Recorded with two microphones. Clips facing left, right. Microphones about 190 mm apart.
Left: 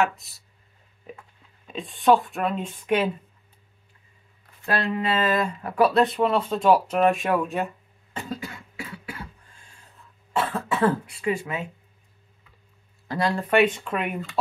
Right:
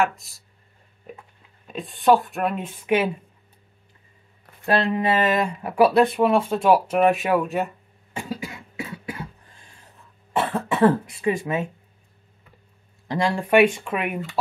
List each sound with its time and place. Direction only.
1.7 s speech: centre (ahead or behind)
4.6 s speech: 20° right (ahead or behind)
10.4 s cough: 20° right (ahead or behind)
10.8 s speech: 30° right (ahead or behind)
11.3 s speech: 20° right (ahead or behind)
13.1 s speech: 10° right (ahead or behind)